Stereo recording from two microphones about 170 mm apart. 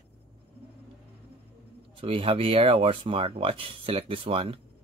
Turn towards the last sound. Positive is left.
turn(degrees=-35)  # may be behind; listen again after turning